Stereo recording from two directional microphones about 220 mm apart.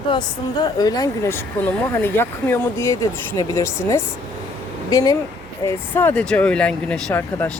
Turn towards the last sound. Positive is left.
turn(degrees=10)  # may be behind; listen again after turning